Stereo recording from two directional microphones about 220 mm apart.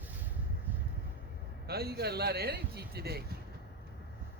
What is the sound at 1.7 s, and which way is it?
Speech, 45° right (ahead or behind).